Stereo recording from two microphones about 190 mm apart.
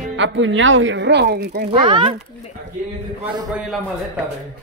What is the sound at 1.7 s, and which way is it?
Speech, 25° right (ahead or behind).